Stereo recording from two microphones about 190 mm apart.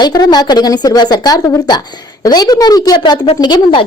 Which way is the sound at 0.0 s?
20° left (ahead or behind).